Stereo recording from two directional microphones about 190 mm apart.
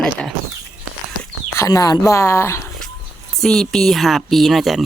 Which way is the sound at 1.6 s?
20° left (ahead or behind).